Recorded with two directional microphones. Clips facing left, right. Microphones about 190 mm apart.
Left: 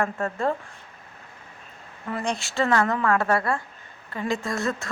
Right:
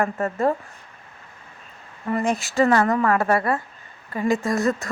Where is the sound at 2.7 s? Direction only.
15° right (ahead or behind).